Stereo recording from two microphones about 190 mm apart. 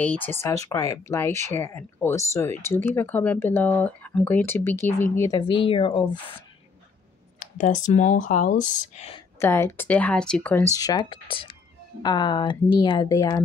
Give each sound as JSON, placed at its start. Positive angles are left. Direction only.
{"t": 0.0, "sound": "speech", "side_deg": 10}
{"t": 7.3, "sound": "speech", "side_deg": 40}
{"t": 9.4, "sound": "a woman's voice", "side_deg": 15}